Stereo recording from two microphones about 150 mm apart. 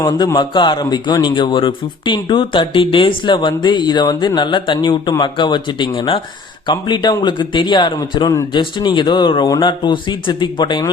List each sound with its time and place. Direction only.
0.0 s a man's voice: 25° left (ahead or behind)